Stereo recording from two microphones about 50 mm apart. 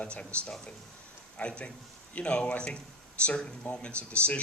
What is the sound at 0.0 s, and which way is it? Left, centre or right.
Speech, left.